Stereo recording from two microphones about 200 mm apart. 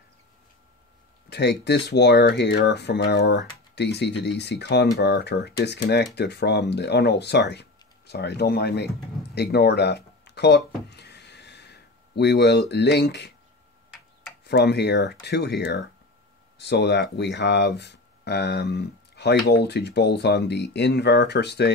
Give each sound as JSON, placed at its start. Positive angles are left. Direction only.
{"t": 1.3, "sound": "speech", "side_deg": 55}
{"t": 14.4, "sound": "speech", "side_deg": 55}